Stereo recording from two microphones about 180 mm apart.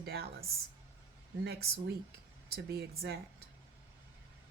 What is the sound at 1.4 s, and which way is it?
A woman's voice, 65° right (ahead or behind).